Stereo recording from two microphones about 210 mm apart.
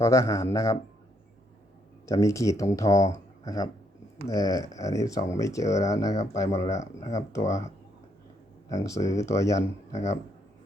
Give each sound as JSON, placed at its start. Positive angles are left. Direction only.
{"t": 0.0, "sound": "speech", "side_deg": 15}
{"t": 2.0, "sound": "speech", "side_deg": 15}
{"t": 5.6, "sound": "speech", "side_deg": 35}
{"t": 8.7, "sound": "speech", "side_deg": 15}
{"t": 9.9, "sound": "speech", "side_deg": 30}